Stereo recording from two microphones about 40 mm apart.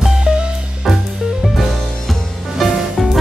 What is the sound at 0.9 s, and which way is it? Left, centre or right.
Music, centre.